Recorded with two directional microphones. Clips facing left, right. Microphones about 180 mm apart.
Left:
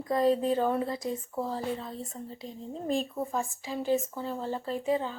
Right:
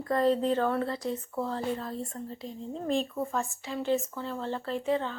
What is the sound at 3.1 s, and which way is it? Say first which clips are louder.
Speech: even; 15° left (ahead or behind).